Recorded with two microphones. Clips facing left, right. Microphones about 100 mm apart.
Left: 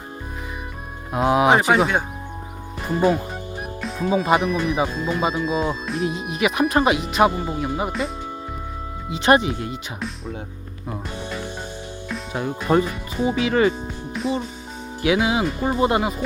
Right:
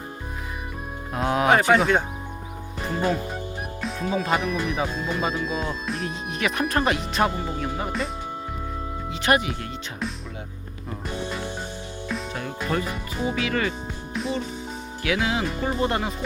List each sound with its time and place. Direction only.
1.1 s speech: 10° left (ahead or behind)
3.8 s music: centre (ahead or behind)
4.4 s speech: centre (ahead or behind)
9.1 s speech: 25° left (ahead or behind)
12.3 s speech: 20° left (ahead or behind)
14.1 s music: centre (ahead or behind)
15.0 s speech: 20° left (ahead or behind)